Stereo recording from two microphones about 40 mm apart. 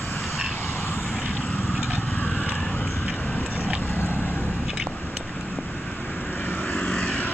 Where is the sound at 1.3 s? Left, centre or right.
Left.